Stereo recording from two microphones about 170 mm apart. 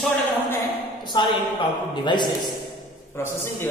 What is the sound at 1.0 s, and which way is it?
A man's voice, 25° left (ahead or behind).